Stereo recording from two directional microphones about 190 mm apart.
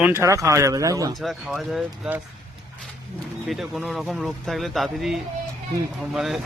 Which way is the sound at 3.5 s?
Centre (ahead or behind).